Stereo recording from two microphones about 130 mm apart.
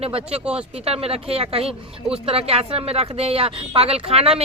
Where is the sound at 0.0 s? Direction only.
50° right (ahead or behind).